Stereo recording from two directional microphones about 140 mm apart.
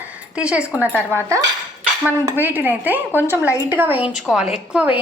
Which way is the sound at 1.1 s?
20° right (ahead or behind).